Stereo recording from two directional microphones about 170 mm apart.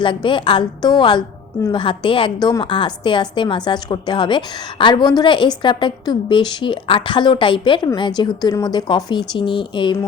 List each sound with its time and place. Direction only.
0.0 s a woman's voice: 30° left (ahead or behind)